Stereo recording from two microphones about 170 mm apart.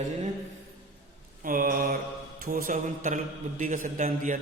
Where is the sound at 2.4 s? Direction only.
55° right (ahead or behind).